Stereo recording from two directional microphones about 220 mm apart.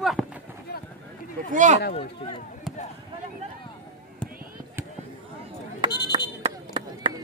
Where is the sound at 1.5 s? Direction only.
35° right (ahead or behind).